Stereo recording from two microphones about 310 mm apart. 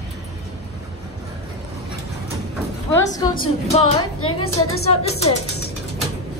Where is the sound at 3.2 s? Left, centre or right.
Centre.